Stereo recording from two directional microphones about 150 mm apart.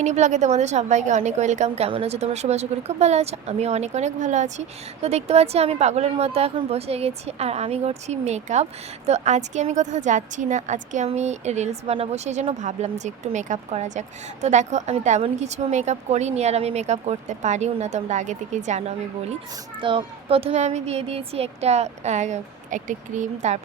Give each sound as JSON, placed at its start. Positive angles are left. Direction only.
{"t": 0.0, "sound": "a woman's voice", "side_deg": -50}
{"t": 19.8, "sound": "a woman's voice", "side_deg": -35}